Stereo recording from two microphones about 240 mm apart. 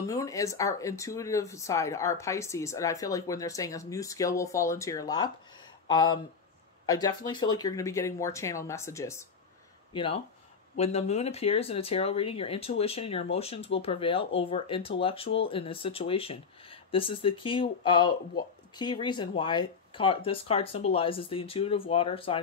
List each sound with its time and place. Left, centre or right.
0.0 s speech: centre
9.9 s speech: left